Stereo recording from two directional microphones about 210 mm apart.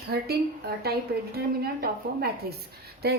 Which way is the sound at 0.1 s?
50° right (ahead or behind).